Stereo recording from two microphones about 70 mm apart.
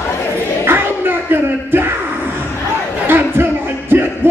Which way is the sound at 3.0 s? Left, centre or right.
Right.